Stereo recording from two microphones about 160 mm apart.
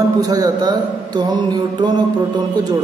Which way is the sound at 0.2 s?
25° right (ahead or behind).